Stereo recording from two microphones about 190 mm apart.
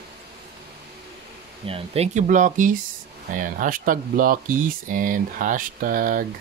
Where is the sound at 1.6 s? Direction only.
30° right (ahead or behind); by 6.3 s 45° right (ahead or behind).